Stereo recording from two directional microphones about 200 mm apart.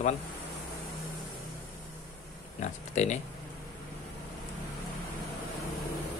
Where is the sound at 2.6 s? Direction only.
35° left (ahead or behind).